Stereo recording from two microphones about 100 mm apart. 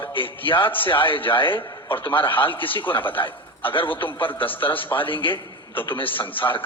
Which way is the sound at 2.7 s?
55° left (ahead or behind).